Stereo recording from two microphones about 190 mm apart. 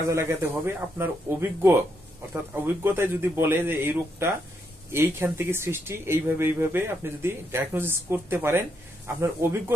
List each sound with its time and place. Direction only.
0.1 s speech: 15° right (ahead or behind)